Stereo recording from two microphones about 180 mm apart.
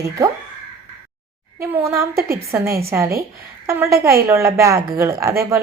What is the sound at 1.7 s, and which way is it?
Speech, 15° right (ahead or behind).